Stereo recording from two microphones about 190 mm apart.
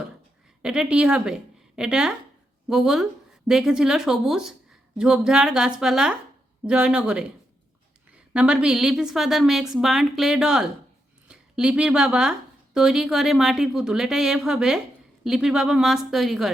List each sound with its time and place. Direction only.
0.6 s a woman's voice: 5° right (ahead or behind)